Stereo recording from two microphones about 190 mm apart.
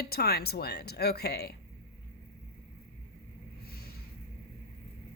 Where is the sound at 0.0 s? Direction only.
55° left (ahead or behind).